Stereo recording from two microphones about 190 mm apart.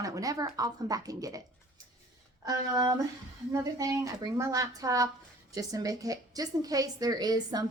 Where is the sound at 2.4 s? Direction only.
20° right (ahead or behind).